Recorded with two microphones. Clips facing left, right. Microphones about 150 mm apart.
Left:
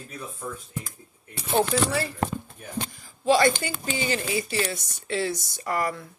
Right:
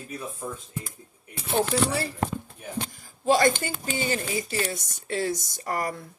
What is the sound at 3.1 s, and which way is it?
Speech, 45° right (ahead or behind).